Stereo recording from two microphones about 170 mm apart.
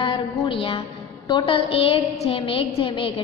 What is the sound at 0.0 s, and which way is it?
A woman's voice, 30° left (ahead or behind).